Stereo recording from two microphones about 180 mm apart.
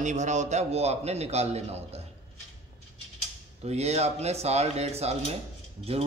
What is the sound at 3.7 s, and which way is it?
A man's voice, 35° right (ahead or behind).